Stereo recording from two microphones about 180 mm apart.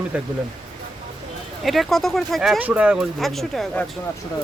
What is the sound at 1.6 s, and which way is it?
Speech, centre (ahead or behind).